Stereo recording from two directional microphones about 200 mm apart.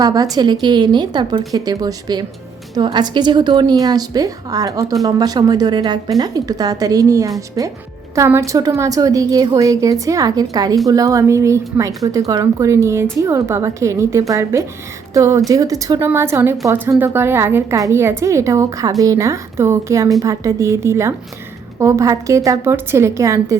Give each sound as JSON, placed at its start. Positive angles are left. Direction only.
{"t": 0.0, "sound": "a woman's voice", "side_deg": -20}